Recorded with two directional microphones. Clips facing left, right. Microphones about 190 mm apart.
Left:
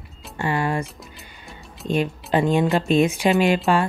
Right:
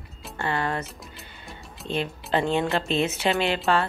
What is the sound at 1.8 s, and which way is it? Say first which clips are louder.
Speech: left 6 dB; 10° left (ahead or behind).